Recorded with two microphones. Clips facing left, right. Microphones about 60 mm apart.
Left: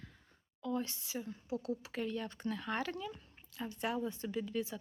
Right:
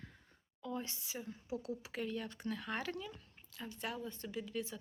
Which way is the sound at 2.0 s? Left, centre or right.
Centre.